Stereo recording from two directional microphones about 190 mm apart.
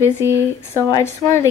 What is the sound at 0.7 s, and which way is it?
Speech, 15° left (ahead or behind).